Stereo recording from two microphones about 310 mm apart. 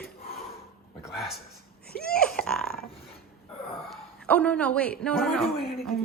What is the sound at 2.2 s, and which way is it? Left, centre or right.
Burping, centre.